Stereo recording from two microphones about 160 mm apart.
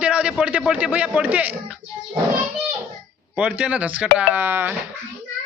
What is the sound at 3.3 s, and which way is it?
A man's voice, 5° right (ahead or behind).